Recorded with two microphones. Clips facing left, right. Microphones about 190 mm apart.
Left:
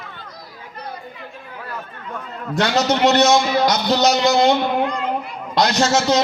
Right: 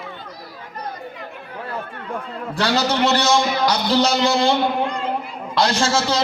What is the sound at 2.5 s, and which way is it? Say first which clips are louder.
A man's voice: left 2 dB; 35° right (ahead or behind).